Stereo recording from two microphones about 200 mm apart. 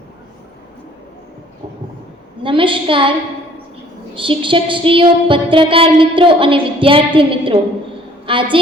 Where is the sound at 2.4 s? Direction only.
25° right (ahead or behind).